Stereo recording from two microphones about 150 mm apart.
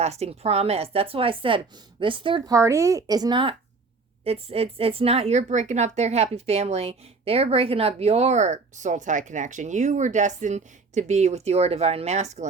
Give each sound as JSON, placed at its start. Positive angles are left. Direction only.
{"t": 0.0, "sound": "speech", "side_deg": -45}
{"t": 2.5, "sound": "speech", "side_deg": -20}
{"t": 4.2, "sound": "a woman's voice", "side_deg": -40}